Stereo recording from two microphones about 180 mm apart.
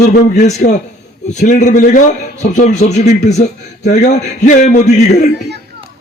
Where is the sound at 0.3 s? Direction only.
40° left (ahead or behind).